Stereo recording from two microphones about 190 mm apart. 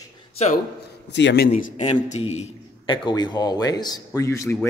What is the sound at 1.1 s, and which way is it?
Speech, 65° left (ahead or behind).